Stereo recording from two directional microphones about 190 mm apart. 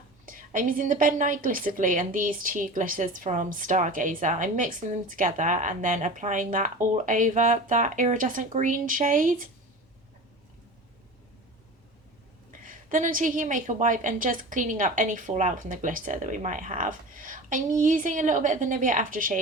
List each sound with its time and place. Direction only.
0.3 s a woman's voice: 45° right (ahead or behind)
12.6 s a woman's voice: 45° right (ahead or behind)